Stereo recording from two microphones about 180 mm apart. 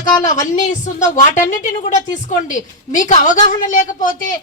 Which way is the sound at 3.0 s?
45° left (ahead or behind).